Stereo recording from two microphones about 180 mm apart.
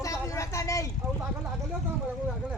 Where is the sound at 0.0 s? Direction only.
15° left (ahead or behind).